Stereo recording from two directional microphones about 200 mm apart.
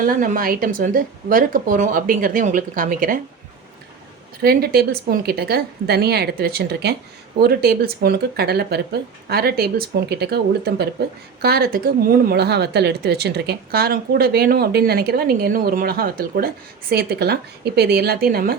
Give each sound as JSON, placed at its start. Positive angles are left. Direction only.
{"t": 0.0, "sound": "speech", "side_deg": -45}
{"t": 4.4, "sound": "speech", "side_deg": -50}